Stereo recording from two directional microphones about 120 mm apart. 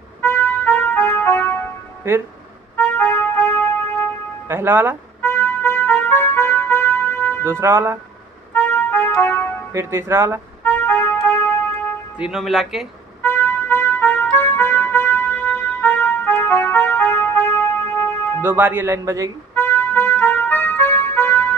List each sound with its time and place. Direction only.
0.2 s music: 20° left (ahead or behind)
2.7 s music: 15° left (ahead or behind)
4.5 s speech: 20° right (ahead or behind)
5.2 s music: 20° left (ahead or behind)
7.6 s speech: 25° right (ahead or behind)
8.5 s music: 15° left (ahead or behind)
9.7 s speech: 25° right (ahead or behind)
10.6 s music: 15° left (ahead or behind)
12.2 s speech: 5° right (ahead or behind)
13.2 s music: 15° left (ahead or behind)
18.4 s speech: 15° right (ahead or behind)
19.5 s music: 15° left (ahead or behind)